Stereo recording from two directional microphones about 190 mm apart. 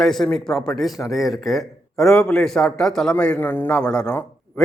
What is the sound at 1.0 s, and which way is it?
Speech, 15° left (ahead or behind).